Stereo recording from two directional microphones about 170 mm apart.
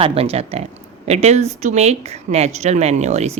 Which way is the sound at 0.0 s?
35° right (ahead or behind).